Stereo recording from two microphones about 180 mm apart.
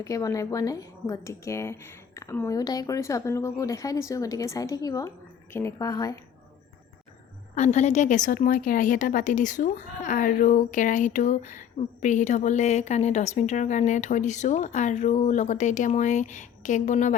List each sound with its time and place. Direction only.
0.0 s speech: 20° left (ahead or behind)
7.5 s a woman's voice: 40° left (ahead or behind)